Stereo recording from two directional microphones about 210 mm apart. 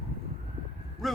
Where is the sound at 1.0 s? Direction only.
Centre (ahead or behind).